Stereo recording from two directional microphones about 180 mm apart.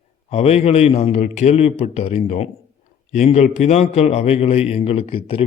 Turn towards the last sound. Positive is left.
turn(degrees=30)  # may be behind; listen again after turning